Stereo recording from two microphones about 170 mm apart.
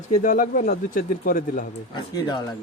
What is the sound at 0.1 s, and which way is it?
Speech, 50° left (ahead or behind).